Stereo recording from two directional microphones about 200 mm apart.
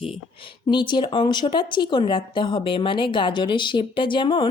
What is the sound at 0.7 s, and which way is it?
Speech, 25° left (ahead or behind).